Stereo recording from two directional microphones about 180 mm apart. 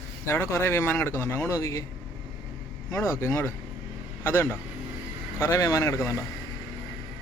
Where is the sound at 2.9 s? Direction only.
15° left (ahead or behind).